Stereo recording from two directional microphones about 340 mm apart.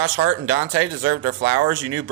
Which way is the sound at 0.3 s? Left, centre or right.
Right.